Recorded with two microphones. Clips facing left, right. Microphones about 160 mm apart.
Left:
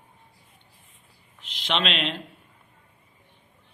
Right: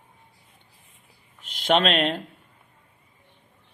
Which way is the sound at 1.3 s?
45° right (ahead or behind).